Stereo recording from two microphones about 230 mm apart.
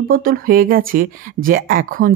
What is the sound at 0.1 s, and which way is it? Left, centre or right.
Speech, right.